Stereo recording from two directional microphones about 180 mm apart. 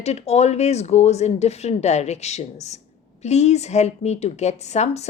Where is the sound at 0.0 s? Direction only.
35° left (ahead or behind).